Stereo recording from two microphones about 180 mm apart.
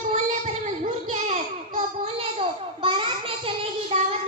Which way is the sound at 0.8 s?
40° right (ahead or behind).